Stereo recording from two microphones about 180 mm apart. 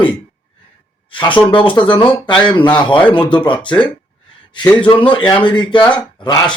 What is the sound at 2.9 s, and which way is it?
Speech, 10° left (ahead or behind).